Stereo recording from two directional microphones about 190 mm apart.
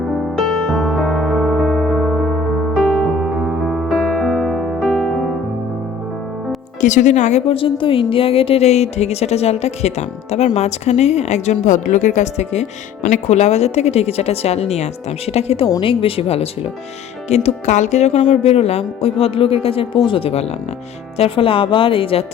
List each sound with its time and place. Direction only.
0.3 s electric piano: centre (ahead or behind)
6.8 s a woman's voice: 40° left (ahead or behind)